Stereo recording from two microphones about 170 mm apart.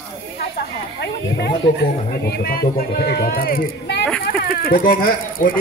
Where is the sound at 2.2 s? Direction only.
65° left (ahead or behind).